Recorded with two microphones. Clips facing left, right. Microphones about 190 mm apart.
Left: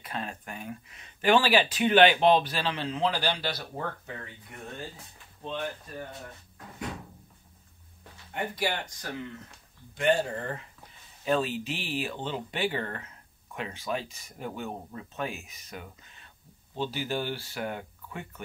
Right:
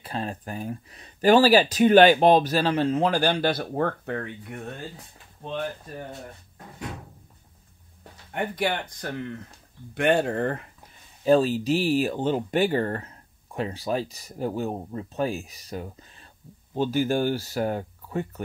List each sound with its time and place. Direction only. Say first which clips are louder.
0.0 s speech: right 5 dB; 35° right (ahead or behind); by 4.6 s 60° right (ahead or behind)
8.3 s speech: right 4 dB; 55° right (ahead or behind)
11.2 s speech: right 8 dB; 35° right (ahead or behind)
16.7 s speech: right 8 dB; 45° right (ahead or behind)